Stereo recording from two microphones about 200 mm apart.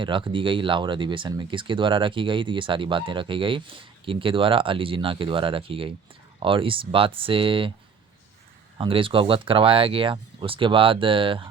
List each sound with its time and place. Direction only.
0.0 s speech: 25° right (ahead or behind)
8.8 s speech: 25° right (ahead or behind)